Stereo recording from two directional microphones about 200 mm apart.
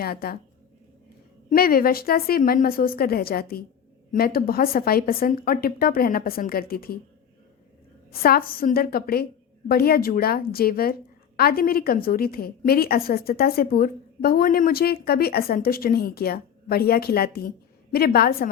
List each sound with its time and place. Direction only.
0.0 s a woman's voice: 50° left (ahead or behind)
1.5 s a woman's voice: 50° left (ahead or behind)
8.1 s a woman's voice: 50° left (ahead or behind)